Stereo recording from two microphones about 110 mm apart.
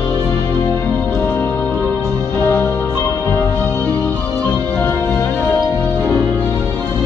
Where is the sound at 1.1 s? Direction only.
20° left (ahead or behind).